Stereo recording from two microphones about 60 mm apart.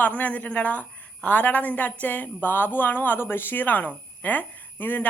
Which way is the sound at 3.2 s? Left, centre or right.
Left.